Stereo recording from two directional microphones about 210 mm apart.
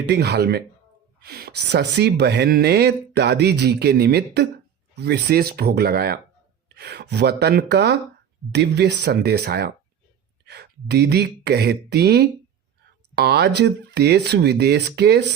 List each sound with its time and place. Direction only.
0.1 s speech: 50° right (ahead or behind)